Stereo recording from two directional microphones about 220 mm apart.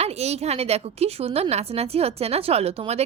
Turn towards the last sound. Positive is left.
turn(degrees=-30)  # may be behind; listen again after turning